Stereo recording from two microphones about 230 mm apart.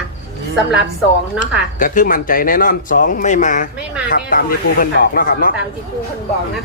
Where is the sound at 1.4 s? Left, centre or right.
Left.